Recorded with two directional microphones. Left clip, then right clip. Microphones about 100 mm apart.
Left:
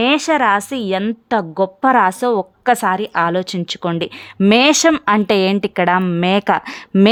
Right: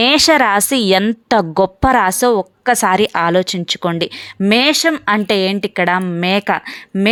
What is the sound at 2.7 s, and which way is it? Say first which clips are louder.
Speech: right 7 dB; 30° right (ahead or behind).